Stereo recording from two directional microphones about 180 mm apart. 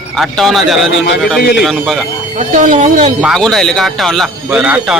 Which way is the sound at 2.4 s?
45° right (ahead or behind).